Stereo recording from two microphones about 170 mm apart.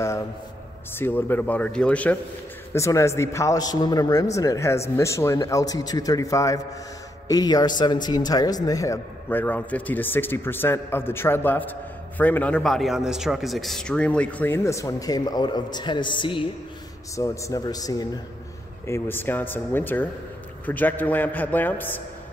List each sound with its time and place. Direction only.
0.9 s a man's voice: 10° left (ahead or behind); by 16.4 s 30° left (ahead or behind)
17.1 s a man's voice: 20° left (ahead or behind)